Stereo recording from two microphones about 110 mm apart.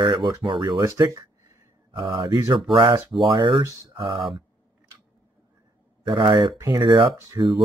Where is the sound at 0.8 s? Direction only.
30° right (ahead or behind).